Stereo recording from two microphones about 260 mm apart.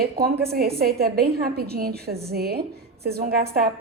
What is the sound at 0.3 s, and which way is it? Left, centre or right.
A woman's voice, right.